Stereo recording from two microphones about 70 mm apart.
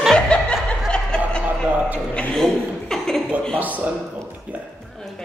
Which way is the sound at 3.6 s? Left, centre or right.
Right.